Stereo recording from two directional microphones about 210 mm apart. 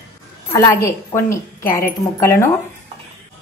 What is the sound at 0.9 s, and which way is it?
A woman's voice, 15° left (ahead or behind).